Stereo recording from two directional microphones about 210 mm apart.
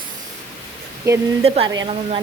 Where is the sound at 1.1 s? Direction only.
15° right (ahead or behind).